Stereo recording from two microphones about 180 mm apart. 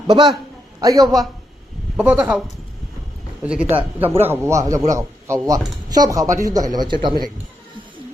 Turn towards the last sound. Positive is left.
turn(degrees=-25)  # may be behind; listen again after turning